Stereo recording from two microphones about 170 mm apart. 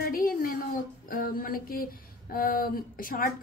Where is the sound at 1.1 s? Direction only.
55° left (ahead or behind).